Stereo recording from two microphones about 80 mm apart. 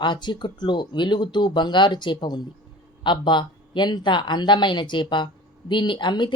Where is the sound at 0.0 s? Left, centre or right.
Left.